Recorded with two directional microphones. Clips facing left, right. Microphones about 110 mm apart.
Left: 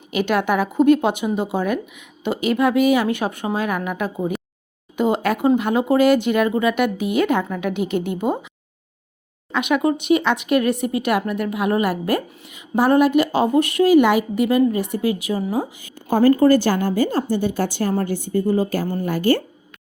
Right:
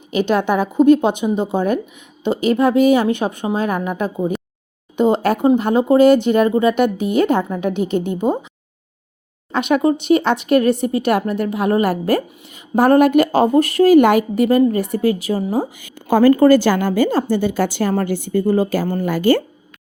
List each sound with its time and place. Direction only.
0.1 s a woman's voice: 25° right (ahead or behind)
9.5 s speech: 35° right (ahead or behind)
15.7 s a woman's voice: 85° right